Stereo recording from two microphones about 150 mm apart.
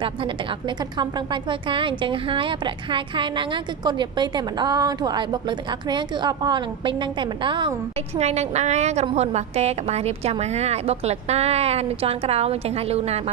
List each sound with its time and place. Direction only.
0.0 s a woman's voice: 35° right (ahead or behind)
8.2 s a woman's voice: 45° right (ahead or behind)